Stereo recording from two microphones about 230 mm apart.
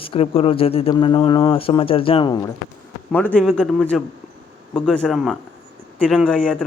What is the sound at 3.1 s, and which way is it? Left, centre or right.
Speech, centre.